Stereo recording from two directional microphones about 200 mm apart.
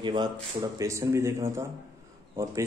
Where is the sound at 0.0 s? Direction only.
25° right (ahead or behind).